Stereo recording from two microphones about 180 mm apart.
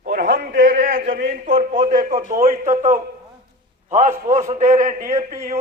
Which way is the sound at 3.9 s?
40° right (ahead or behind).